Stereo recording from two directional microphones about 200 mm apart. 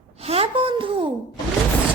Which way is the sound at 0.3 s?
30° right (ahead or behind).